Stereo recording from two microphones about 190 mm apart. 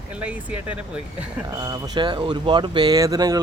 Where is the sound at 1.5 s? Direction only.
20° right (ahead or behind).